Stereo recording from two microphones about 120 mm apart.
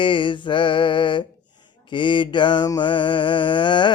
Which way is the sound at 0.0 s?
45° left (ahead or behind).